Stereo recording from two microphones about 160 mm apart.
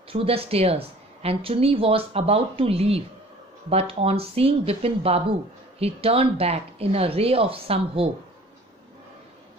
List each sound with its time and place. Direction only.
0.1 s speech: 35° right (ahead or behind)